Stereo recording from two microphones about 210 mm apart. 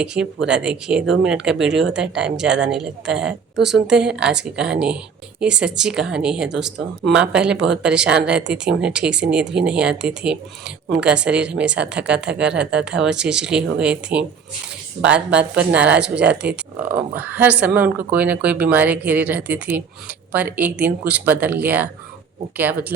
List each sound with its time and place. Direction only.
0.0 s speech: 5° right (ahead or behind)
16.1 s speech: 55° right (ahead or behind)
16.9 s speech: 10° right (ahead or behind)